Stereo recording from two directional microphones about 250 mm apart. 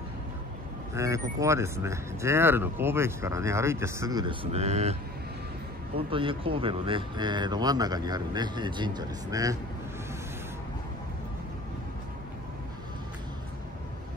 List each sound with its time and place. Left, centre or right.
0.9 s speech: centre
5.9 s speech: right